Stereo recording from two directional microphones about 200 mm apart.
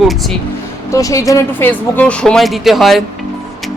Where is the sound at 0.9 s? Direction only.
15° left (ahead or behind).